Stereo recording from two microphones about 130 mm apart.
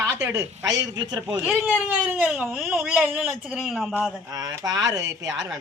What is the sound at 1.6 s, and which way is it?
Speech, 10° right (ahead or behind).